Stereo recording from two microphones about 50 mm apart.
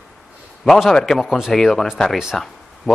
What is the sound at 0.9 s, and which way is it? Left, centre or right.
Speech, centre.